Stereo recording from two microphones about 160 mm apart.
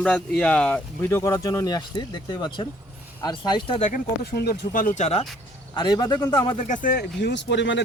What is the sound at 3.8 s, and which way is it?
Speech, 50° left (ahead or behind).